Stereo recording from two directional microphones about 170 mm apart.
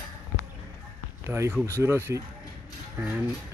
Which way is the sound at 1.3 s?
15° right (ahead or behind).